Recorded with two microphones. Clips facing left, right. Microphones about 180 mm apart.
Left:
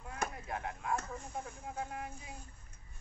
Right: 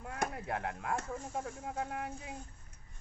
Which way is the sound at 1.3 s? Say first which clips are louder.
Right 3 dB; 70° right (ahead or behind).